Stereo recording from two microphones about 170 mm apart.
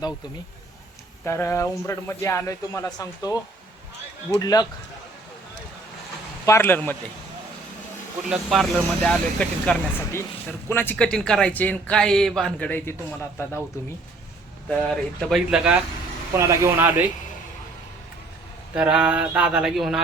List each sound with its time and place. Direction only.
1.2 s speech: 15° left (ahead or behind)
4.4 s a man's voice: 20° left (ahead or behind)
6.4 s speech: 15° left (ahead or behind)
8.3 s speech: centre (ahead or behind)
9.4 s speech: 10° left (ahead or behind)
14.7 s speech: 5° left (ahead or behind)
16.5 s a sound: 15° right (ahead or behind)
18.7 s a sound: 5° right (ahead or behind)